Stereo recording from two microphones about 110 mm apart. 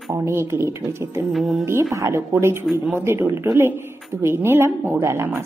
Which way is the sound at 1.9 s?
25° right (ahead or behind).